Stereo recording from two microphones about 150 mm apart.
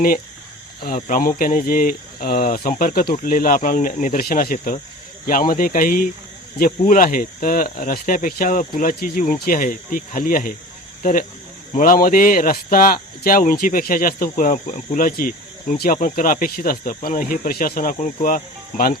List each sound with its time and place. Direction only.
0.9 s speech: 60° left (ahead or behind)
18.0 s speech: 60° left (ahead or behind)